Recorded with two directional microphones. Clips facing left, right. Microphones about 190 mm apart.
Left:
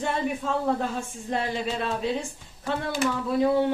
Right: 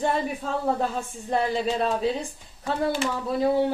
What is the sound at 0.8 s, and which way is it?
Speech, 40° right (ahead or behind).